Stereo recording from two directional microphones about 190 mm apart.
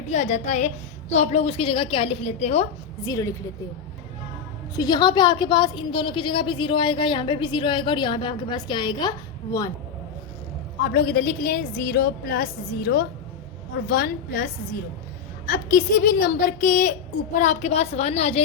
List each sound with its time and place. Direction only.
0.1 s a woman's voice: 35° left (ahead or behind)
3.0 s a woman's voice: 20° left (ahead or behind)
4.7 s a woman's voice: 20° left (ahead or behind)
10.9 s a woman's voice: 50° left (ahead or behind); by 18.4 s 35° left (ahead or behind)